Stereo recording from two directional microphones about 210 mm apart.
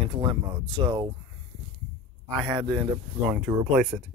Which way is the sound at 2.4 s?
20° right (ahead or behind).